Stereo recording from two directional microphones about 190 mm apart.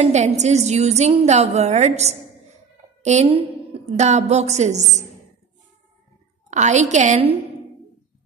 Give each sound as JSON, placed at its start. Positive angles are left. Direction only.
{"t": 0.0, "sound": "a woman's voice", "side_deg": -35}
{"t": 6.5, "sound": "a woman's voice", "side_deg": -40}